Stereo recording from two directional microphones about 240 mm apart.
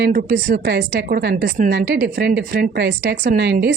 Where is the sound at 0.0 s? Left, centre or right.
Right.